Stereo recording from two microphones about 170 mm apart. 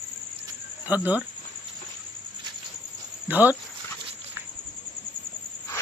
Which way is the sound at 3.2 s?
10° right (ahead or behind).